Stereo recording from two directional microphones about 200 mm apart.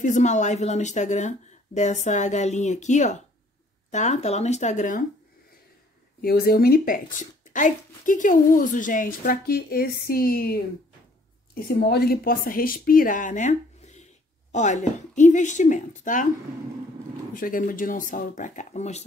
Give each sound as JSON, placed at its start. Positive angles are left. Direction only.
{"t": 0.0, "sound": "a woman's voice", "side_deg": 35}
{"t": 6.2, "sound": "a woman's voice", "side_deg": 50}
{"t": 17.3, "sound": "a woman's voice", "side_deg": 45}